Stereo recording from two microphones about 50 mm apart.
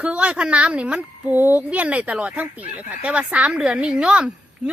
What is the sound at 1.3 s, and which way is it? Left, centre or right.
Speech, right.